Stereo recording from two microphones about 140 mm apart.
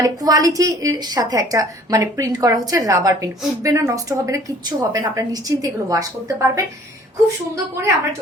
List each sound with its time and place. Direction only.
0.0 s a woman's voice: 25° right (ahead or behind)